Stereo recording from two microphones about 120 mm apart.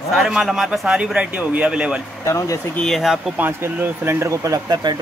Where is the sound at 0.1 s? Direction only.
5° right (ahead or behind).